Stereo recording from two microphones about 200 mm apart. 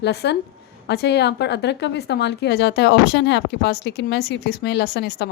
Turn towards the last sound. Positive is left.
turn(degrees=55)  # may be behind; listen again after turning